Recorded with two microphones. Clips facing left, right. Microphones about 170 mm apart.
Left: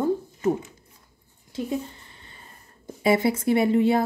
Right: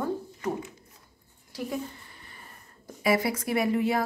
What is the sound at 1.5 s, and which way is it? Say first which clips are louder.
Speech: left 4 dB; 25° left (ahead or behind).